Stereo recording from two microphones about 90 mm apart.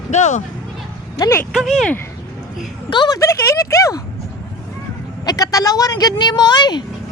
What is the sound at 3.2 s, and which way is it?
Speech, 30° left (ahead or behind).